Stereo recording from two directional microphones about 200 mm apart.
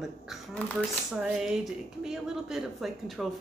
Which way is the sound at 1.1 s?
5° right (ahead or behind).